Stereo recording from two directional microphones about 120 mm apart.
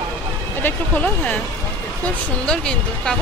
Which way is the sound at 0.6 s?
10° left (ahead or behind).